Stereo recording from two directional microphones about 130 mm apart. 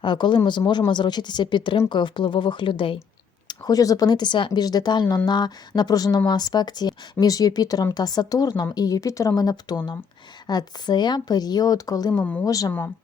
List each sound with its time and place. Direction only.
0.0 s speech: 35° left (ahead or behind)
3.4 s a woman's voice: 30° left (ahead or behind)
12.1 s a woman's voice: 10° left (ahead or behind)
12.5 s a woman's voice: 25° left (ahead or behind)